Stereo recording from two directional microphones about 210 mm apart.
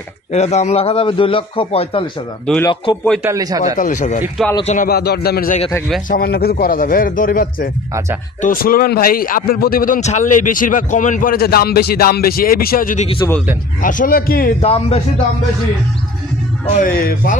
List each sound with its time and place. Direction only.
0.3 s a man's voice: 30° left (ahead or behind)
3.3 s a man's voice: 15° right (ahead or behind)
3.7 s speech: 40° left (ahead or behind)
4.4 s speech: centre (ahead or behind)
4.7 s a man's voice: 45° left (ahead or behind); by 13.3 s 30° left (ahead or behind)
13.8 s a man's voice: 40° left (ahead or behind)
14.6 s a man's voice: 30° left (ahead or behind)
16.7 s speech: 40° left (ahead or behind)